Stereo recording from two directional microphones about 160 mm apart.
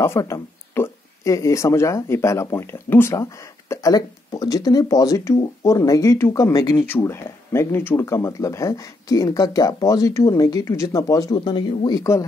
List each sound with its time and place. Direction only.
0.0 s speech: 15° left (ahead or behind)